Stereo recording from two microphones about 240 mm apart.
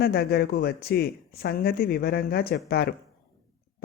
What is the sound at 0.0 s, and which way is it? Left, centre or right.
Speech, left.